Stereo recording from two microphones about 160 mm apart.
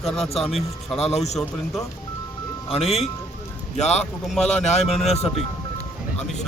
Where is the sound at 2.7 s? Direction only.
40° left (ahead or behind).